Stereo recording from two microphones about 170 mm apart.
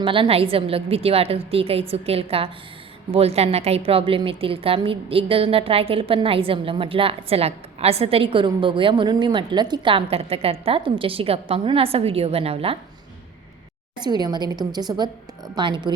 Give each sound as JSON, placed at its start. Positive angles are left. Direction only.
{"t": 0.0, "sound": "a woman's voice", "side_deg": -30}
{"t": 14.0, "sound": "a woman's voice", "side_deg": -25}